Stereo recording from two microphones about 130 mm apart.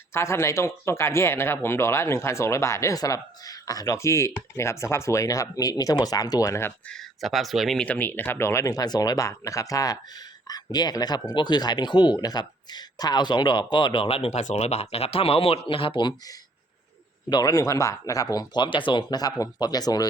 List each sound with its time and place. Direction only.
0.1 s speech: 20° left (ahead or behind)
6.9 s speech: centre (ahead or behind); by 20.1 s 30° left (ahead or behind)